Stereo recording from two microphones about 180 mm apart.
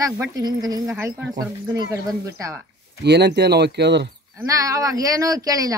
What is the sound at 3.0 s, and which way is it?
Speech, 70° right (ahead or behind).